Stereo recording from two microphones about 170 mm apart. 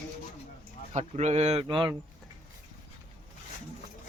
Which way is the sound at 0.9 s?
40° right (ahead or behind).